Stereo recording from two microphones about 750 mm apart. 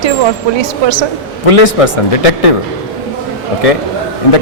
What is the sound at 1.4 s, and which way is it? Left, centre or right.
Speech, left.